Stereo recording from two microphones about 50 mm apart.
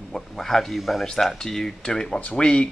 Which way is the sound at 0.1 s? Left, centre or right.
Centre.